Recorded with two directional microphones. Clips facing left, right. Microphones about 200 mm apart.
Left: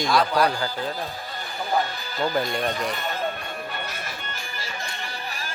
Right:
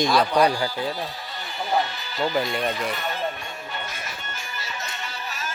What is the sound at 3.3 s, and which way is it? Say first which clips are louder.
Music: left 2 dB; 60° left (ahead or behind).